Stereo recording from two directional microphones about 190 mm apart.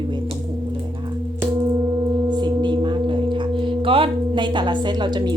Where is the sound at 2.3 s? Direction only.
25° right (ahead or behind).